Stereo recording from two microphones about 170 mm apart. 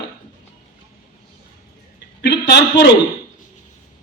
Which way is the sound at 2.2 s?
85° left.